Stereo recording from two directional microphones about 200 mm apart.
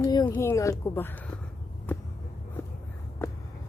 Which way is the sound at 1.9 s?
10° left (ahead or behind).